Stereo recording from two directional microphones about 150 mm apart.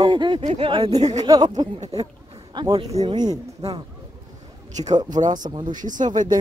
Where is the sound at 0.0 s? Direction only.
30° right (ahead or behind).